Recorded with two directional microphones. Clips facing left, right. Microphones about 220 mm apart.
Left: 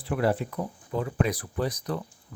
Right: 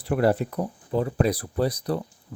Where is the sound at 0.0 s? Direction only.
40° right (ahead or behind).